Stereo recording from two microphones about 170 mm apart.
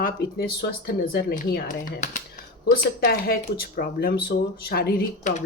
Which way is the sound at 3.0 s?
60° left (ahead or behind).